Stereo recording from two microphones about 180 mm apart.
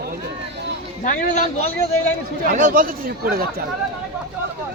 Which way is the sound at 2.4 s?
50° right (ahead or behind).